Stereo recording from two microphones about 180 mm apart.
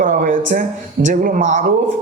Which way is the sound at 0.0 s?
45° right (ahead or behind).